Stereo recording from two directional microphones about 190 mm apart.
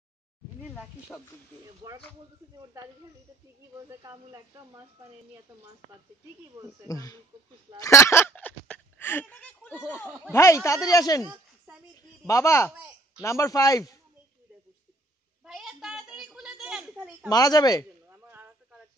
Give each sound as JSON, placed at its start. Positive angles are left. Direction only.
{"t": 0.6, "sound": "a sound", "side_deg": -10}
{"t": 1.8, "sound": "speech", "side_deg": -20}
{"t": 4.0, "sound": "speech", "side_deg": -15}
{"t": 6.9, "sound": "speech", "side_deg": 20}
{"t": 7.8, "sound": "a sound", "side_deg": 15}
{"t": 10.3, "sound": "speech", "side_deg": 15}
{"t": 12.3, "sound": "speech", "side_deg": 15}
{"t": 15.4, "sound": "a sound", "side_deg": 0}
{"t": 17.3, "sound": "speech", "side_deg": 20}